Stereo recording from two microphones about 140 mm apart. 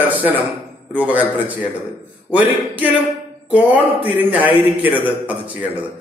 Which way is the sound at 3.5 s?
10° right (ahead or behind).